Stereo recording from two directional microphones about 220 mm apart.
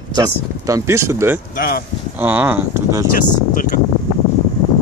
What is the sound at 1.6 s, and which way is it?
Speech, 45° left (ahead or behind).